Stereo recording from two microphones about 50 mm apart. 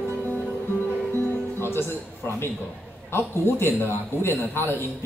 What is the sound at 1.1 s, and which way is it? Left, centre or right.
Music, left.